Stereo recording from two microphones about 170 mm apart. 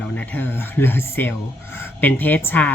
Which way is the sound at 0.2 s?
10° left (ahead or behind).